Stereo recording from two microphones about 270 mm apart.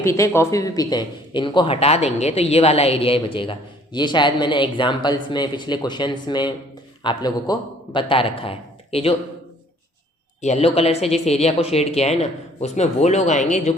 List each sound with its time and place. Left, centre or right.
0.0 s a man's voice: centre
10.4 s speech: left